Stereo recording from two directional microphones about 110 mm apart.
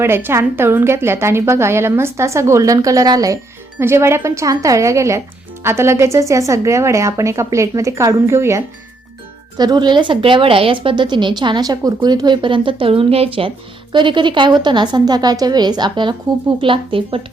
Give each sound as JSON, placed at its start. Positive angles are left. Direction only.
{"t": 0.0, "sound": "a woman's voice", "side_deg": -20}
{"t": 3.8, "sound": "a woman's voice", "side_deg": -25}
{"t": 9.6, "sound": "a woman's voice", "side_deg": -40}
{"t": 13.9, "sound": "a woman's voice", "side_deg": -45}